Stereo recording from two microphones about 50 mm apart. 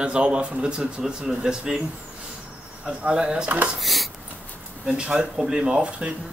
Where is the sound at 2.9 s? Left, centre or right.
Centre.